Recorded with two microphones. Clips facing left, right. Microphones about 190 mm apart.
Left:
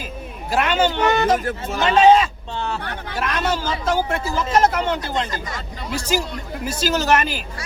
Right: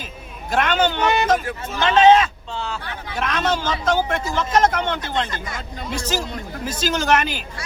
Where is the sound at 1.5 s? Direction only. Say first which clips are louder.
Left 3 dB; 40° left (ahead or behind).